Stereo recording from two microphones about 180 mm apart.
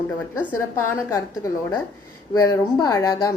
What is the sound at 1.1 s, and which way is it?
Speech, 20° left (ahead or behind).